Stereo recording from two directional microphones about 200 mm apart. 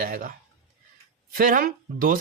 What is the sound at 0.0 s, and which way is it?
A child's voice, 45° right (ahead or behind).